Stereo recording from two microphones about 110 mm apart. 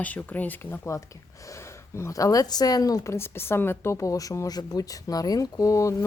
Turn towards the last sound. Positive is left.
turn(degrees=30)  # may be behind; listen again after turning